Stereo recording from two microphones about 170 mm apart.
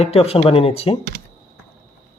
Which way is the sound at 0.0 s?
35° left (ahead or behind).